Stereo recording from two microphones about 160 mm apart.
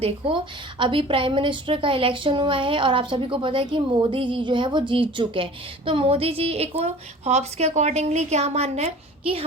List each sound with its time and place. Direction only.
0.0 s a woman's voice: 35° right (ahead or behind)